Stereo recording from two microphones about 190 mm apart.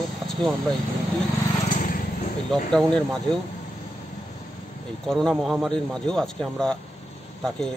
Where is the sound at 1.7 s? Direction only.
45° left (ahead or behind).